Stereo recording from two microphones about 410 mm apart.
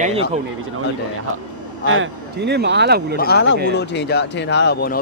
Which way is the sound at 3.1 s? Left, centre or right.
Left.